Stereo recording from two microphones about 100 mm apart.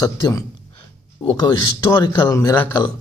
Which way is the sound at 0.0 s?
35° left (ahead or behind).